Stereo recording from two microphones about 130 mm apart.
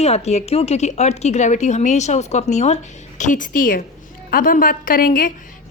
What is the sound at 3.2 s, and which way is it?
A woman's voice, 75° left (ahead or behind).